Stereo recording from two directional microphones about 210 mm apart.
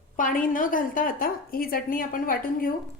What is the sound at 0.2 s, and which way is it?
A woman's voice, 40° left (ahead or behind).